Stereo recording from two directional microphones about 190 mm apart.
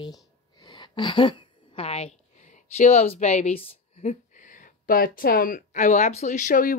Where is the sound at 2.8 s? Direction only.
35° left (ahead or behind).